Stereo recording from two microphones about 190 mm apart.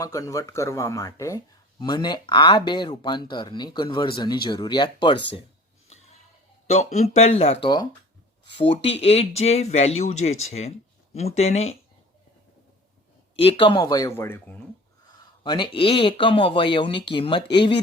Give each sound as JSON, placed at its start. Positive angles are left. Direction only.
{"t": 0.0, "sound": "speech", "side_deg": 20}
{"t": 6.7, "sound": "speech", "side_deg": 35}
{"t": 13.4, "sound": "speech", "side_deg": 30}
{"t": 15.4, "sound": "speech", "side_deg": 25}